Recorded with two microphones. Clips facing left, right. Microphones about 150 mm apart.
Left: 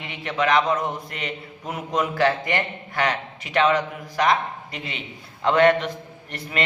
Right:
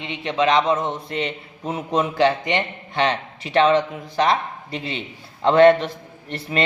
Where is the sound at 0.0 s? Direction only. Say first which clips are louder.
Right 4 dB; 25° right (ahead or behind).